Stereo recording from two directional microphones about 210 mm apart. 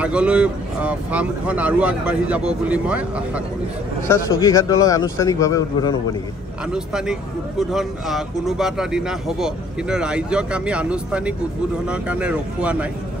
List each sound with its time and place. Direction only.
0.0 s speech: 5° right (ahead or behind)
4.1 s a man's voice: 15° left (ahead or behind)
6.7 s speech: 5° right (ahead or behind)